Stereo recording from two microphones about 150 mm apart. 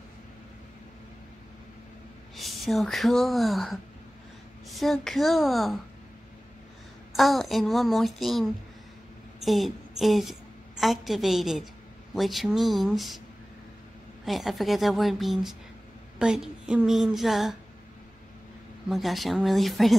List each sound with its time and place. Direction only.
2.3 s speech: centre (ahead or behind)
7.1 s speech: centre (ahead or behind)
9.4 s a sound: centre (ahead or behind)
10.8 s speech: centre (ahead or behind)
14.2 s speech: centre (ahead or behind)
18.9 s speech: centre (ahead or behind)